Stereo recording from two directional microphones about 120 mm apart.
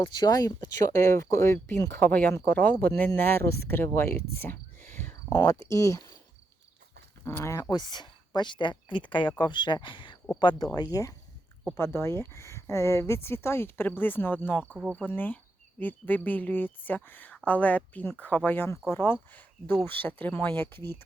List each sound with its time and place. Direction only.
0.0 s speech: 40° left (ahead or behind); by 5.1 s 15° left (ahead or behind)
5.3 s speech: 30° left (ahead or behind)
7.3 s speech: 20° left (ahead or behind)
7.7 s speech: 35° left (ahead or behind)
10.9 s speech: 30° left (ahead or behind)